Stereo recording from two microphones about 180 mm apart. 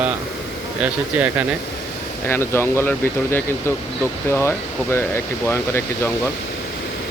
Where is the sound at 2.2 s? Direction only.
15° left (ahead or behind).